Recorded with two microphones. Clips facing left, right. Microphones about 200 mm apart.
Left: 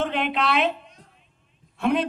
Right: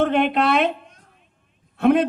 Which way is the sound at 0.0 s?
50° right (ahead or behind).